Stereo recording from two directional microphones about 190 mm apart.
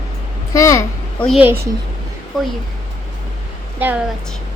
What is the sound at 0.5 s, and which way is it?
Speech, 15° left (ahead or behind).